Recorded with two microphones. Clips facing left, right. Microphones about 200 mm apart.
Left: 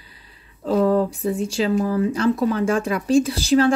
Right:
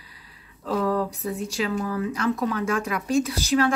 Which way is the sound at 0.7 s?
25° left (ahead or behind).